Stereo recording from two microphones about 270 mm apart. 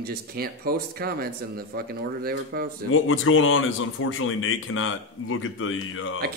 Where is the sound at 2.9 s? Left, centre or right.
Left.